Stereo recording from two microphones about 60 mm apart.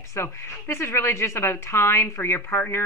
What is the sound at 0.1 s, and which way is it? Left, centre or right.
A woman's voice, left.